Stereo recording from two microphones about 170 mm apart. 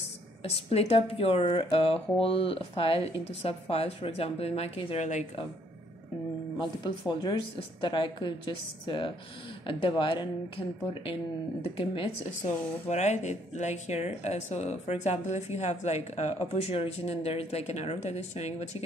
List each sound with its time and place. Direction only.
0.4 s speech: 35° left (ahead or behind)
6.6 s a woman's voice: 25° left (ahead or behind)
11.6 s speech: 35° left (ahead or behind)